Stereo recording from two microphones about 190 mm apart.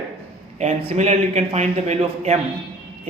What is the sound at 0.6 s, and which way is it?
Speech, 35° right (ahead or behind).